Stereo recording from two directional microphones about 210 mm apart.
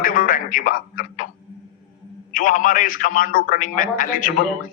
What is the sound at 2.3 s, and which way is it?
A man's voice, 40° left (ahead or behind).